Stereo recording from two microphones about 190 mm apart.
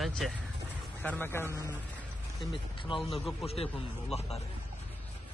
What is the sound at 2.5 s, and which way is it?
Speech, 25° left (ahead or behind).